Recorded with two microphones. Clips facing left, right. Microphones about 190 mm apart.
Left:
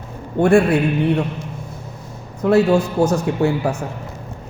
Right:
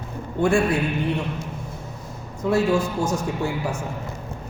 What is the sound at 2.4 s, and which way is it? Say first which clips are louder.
A man's voice: left 6 dB; 65° left (ahead or behind).